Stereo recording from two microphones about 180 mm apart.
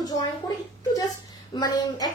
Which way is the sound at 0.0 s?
20° left (ahead or behind).